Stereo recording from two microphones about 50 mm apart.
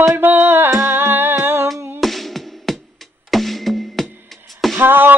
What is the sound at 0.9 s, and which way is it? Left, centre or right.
Music, right.